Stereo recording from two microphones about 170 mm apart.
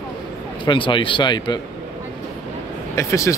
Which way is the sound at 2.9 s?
15° left (ahead or behind).